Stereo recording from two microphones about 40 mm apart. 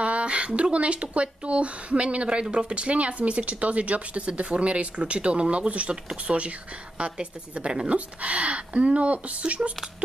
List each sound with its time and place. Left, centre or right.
0.0 s speech: right